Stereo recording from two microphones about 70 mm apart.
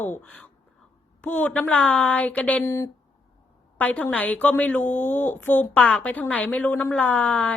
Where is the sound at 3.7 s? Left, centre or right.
Left.